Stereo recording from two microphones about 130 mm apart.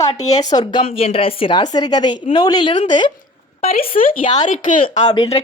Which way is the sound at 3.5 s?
65° left (ahead or behind).